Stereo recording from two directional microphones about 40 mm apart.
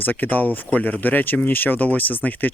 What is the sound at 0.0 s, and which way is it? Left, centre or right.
Speech, left.